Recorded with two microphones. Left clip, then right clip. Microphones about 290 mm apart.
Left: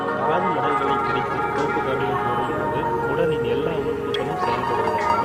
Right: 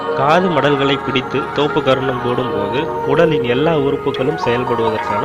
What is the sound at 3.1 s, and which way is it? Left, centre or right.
Speech, right.